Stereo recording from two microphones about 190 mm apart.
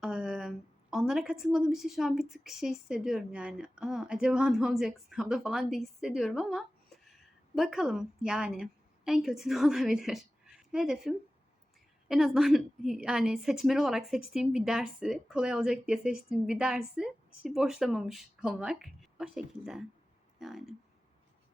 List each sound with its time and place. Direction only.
0.0 s a woman's voice: centre (ahead or behind)